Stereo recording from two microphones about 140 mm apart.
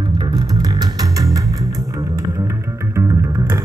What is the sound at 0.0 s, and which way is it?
Music, 30° right (ahead or behind).